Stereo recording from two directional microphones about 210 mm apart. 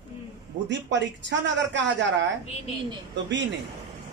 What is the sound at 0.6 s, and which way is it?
Speech, 60° right (ahead or behind).